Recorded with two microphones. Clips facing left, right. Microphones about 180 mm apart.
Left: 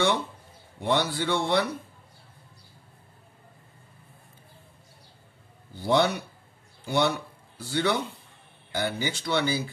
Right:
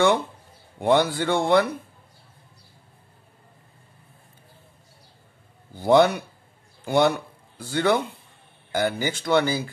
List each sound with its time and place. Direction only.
0.7 s speech: 55° right (ahead or behind)
5.8 s speech: 50° right (ahead or behind)